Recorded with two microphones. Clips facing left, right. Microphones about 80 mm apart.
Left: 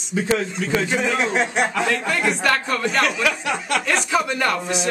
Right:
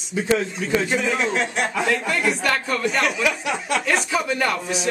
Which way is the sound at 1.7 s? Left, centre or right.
Centre.